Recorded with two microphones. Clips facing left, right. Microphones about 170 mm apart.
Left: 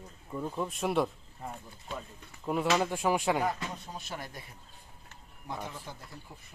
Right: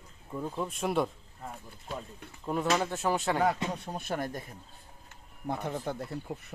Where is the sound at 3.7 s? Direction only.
60° right (ahead or behind).